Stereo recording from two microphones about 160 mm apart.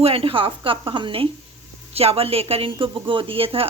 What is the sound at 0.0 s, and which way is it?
Speech, 35° right (ahead or behind).